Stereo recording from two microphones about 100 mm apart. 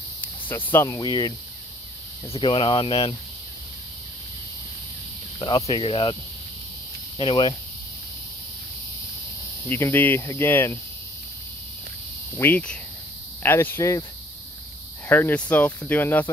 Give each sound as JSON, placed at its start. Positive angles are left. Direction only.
{"t": 0.5, "sound": "speech", "side_deg": 30}
{"t": 1.0, "sound": "speech", "side_deg": 45}
{"t": 2.3, "sound": "speech", "side_deg": 60}
{"t": 5.7, "sound": "speech", "side_deg": 60}
{"t": 7.2, "sound": "speech", "side_deg": 50}
{"t": 9.7, "sound": "speech", "side_deg": 25}
{"t": 12.4, "sound": "speech", "side_deg": 20}
{"t": 15.0, "sound": "speech", "side_deg": 20}